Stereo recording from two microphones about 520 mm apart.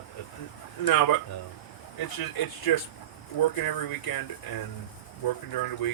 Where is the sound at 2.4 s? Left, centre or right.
Left.